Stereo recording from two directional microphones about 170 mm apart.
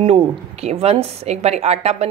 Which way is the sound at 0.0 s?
35° right (ahead or behind).